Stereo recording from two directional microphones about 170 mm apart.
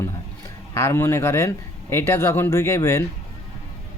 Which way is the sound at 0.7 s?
15° left (ahead or behind).